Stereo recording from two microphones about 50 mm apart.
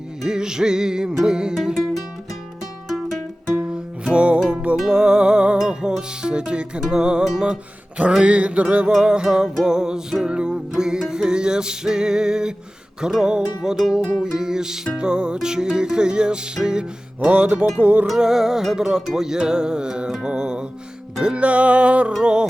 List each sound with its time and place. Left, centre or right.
0.2 s music: centre
1.5 s music: centre
3.5 s music: centre
8.2 s music: right
8.9 s music: centre; by 17.6 s right
17.7 s music: right
18.2 s music: centre